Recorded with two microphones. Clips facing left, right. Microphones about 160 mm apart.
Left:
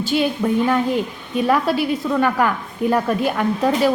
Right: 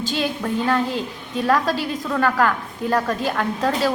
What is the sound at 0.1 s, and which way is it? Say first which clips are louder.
A woman's voice: left 7 dB; 10° left (ahead or behind).